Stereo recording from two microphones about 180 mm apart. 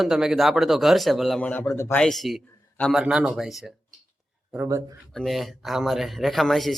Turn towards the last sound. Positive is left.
turn(degrees=0)  # may be behind; listen again after turning